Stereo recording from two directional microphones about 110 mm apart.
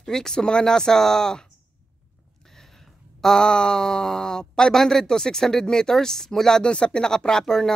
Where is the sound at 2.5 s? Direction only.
5° left (ahead or behind).